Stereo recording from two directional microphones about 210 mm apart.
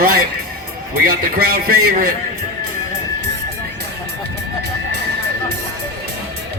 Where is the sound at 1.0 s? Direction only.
45° right (ahead or behind).